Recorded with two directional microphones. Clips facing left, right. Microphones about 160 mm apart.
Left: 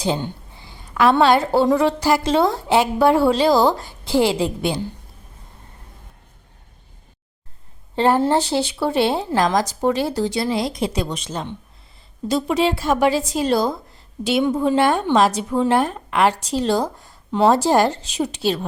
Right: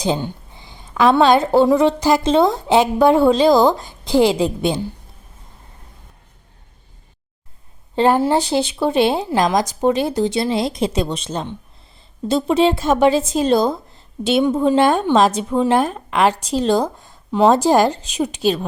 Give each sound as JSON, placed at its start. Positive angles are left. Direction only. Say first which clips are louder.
{"t": 0.0, "sound": "a sound", "louder": "right 2 dB", "side_deg": -15}
{"t": 1.6, "sound": "a woman's voice", "louder": "right 3 dB", "side_deg": -20}
{"t": 7.9, "sound": "a woman's voice", "louder": "right 2 dB", "side_deg": -15}